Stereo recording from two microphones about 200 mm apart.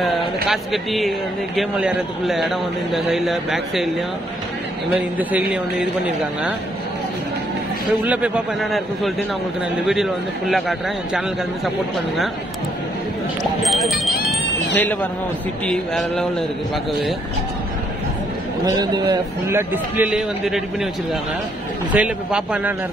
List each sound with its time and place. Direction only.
0.0 s a man's voice: centre (ahead or behind)
5.1 s a man's voice: 10° right (ahead or behind)
8.0 s a man's voice: 5° right (ahead or behind)
10.5 s a man's voice: centre (ahead or behind)
13.4 s a sound: centre (ahead or behind)
14.8 s a man's voice: 10° left (ahead or behind)
18.7 s a man's voice: 20° right (ahead or behind)
19.7 s a man's voice: 10° right (ahead or behind)